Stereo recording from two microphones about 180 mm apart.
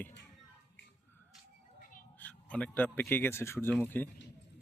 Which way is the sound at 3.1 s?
15° left (ahead or behind).